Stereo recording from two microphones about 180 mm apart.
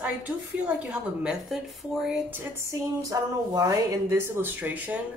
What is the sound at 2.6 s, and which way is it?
Speech, 15° right (ahead or behind).